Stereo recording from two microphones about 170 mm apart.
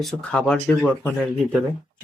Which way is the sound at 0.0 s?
5° left (ahead or behind).